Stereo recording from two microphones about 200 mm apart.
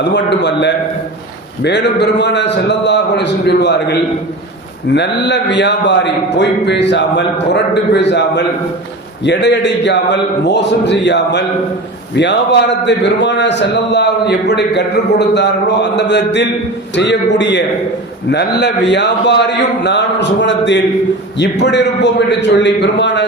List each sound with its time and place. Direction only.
0.0 s a man's voice: 60° left (ahead or behind)
4.9 s a man's voice: 60° left (ahead or behind)